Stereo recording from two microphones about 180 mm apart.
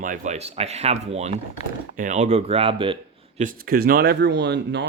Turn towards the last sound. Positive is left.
turn(degrees=-70)  # may be behind; listen again after turning